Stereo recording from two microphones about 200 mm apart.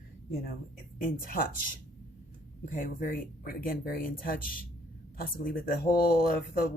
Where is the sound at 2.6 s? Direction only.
40° left (ahead or behind).